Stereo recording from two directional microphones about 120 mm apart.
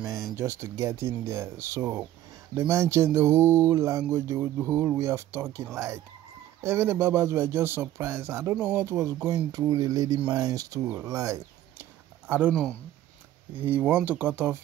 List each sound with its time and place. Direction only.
0.4 s speech: 20° right (ahead or behind)
13.6 s speech: 15° right (ahead or behind)